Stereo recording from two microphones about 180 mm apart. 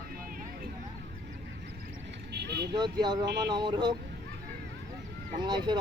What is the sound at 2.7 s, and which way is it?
Speech, 25° right (ahead or behind).